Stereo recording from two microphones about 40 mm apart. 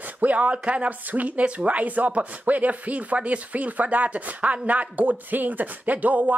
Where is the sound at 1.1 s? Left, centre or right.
Right.